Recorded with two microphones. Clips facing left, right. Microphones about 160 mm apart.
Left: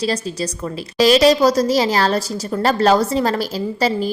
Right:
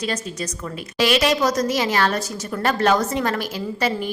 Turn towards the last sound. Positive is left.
turn(degrees=35)  # may be behind; listen again after turning